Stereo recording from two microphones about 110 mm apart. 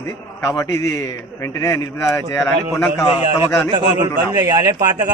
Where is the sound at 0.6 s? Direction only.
25° left (ahead or behind).